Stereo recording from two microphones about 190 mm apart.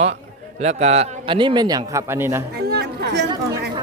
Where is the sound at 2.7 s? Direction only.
60° right (ahead or behind).